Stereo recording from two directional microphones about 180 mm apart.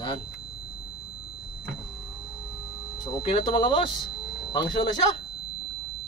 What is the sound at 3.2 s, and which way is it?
Speech, 30° left (ahead or behind).